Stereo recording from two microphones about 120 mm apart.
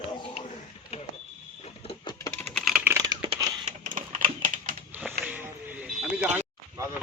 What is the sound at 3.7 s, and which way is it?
Typing, 90° right.